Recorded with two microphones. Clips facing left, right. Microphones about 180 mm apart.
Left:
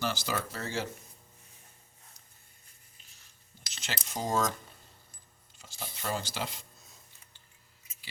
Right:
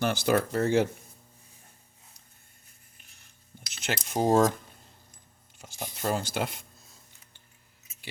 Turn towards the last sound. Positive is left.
turn(degrees=-55)  # may be behind; listen again after turning